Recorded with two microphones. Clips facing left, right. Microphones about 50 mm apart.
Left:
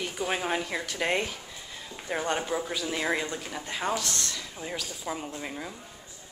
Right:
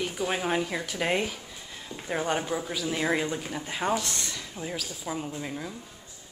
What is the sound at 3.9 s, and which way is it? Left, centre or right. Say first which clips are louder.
Speech: right 1 dB; centre.